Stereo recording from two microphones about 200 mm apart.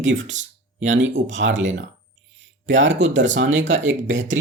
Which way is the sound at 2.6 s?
70° right (ahead or behind).